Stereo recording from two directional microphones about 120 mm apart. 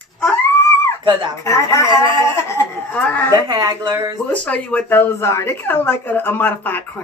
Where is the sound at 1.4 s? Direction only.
25° left (ahead or behind).